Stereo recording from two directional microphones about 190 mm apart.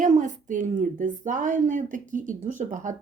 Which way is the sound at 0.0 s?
40° right (ahead or behind).